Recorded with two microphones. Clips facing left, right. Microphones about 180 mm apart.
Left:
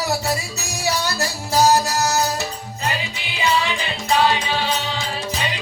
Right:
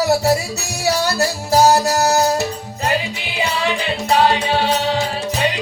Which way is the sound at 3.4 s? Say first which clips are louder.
Right 1 dB; 60° right (ahead or behind).